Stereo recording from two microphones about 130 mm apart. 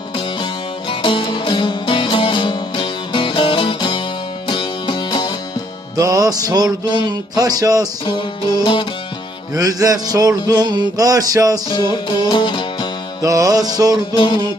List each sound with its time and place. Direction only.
0.9 s music: 40° left (ahead or behind)
6.0 s music: 25° right (ahead or behind)
8.6 s music: 35° left (ahead or behind)
9.6 s music: 30° right (ahead or behind)
11.7 s music: 35° left (ahead or behind)
13.2 s music: 25° right (ahead or behind)